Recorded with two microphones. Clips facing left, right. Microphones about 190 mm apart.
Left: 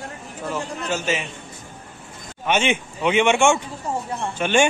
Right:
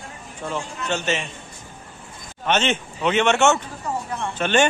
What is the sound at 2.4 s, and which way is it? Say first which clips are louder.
Speech: left 1 dB; 10° left (ahead or behind).